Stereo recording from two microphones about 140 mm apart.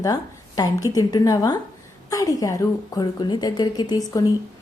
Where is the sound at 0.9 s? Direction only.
25° left (ahead or behind).